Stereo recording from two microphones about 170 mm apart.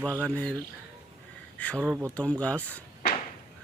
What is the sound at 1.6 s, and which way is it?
Speech, 10° left (ahead or behind).